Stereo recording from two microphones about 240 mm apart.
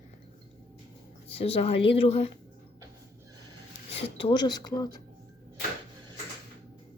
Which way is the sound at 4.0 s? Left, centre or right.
Left.